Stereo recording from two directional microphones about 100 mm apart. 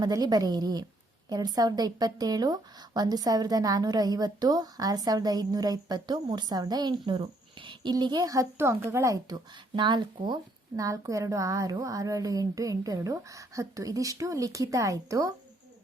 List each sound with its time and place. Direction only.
0.0 s a woman's voice: 40° right (ahead or behind)
8.5 s speech: 25° right (ahead or behind)
9.7 s a woman's voice: 50° right (ahead or behind)
10.8 s a woman's voice: 35° right (ahead or behind)